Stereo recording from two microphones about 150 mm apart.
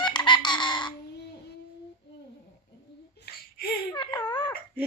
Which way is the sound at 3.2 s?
90° left.